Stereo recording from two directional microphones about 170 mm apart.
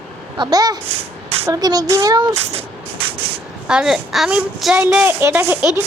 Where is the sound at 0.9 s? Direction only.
35° right (ahead or behind).